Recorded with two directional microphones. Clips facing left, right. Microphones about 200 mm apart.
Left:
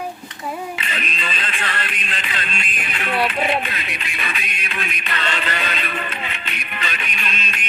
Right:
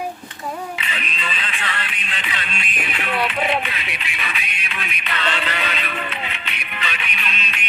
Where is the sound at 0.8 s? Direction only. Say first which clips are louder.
Left 2 dB; 45° left (ahead or behind).